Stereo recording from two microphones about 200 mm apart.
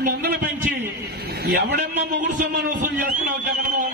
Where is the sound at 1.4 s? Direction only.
55° right (ahead or behind).